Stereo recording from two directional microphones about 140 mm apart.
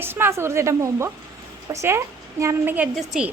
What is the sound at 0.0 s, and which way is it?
A woman's voice, 15° right (ahead or behind).